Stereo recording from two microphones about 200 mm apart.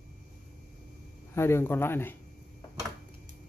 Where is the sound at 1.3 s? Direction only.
10° left (ahead or behind).